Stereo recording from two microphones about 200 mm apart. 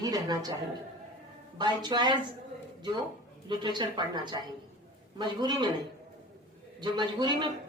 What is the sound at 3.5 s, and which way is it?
Speech, 20° right (ahead or behind).